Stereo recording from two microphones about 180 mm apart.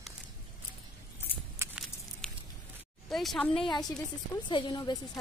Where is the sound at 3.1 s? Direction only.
Centre (ahead or behind).